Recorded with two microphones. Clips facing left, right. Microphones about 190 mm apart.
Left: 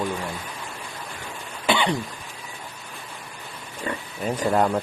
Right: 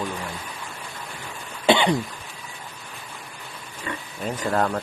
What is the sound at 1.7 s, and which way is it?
Cough, 20° right (ahead or behind).